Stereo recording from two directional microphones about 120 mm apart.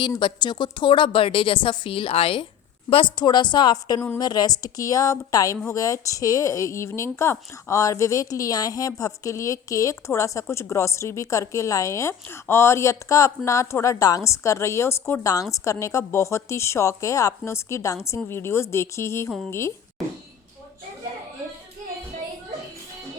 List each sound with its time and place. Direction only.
0.0 s a woman's voice: 40° left (ahead or behind); by 19.7 s 20° left (ahead or behind)